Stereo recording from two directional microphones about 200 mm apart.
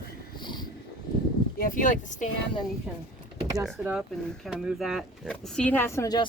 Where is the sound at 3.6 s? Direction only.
5° right (ahead or behind).